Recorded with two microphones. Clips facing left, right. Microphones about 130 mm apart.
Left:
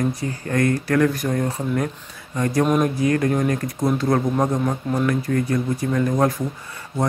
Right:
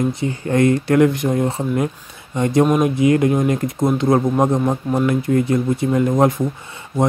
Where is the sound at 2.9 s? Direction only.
20° right (ahead or behind).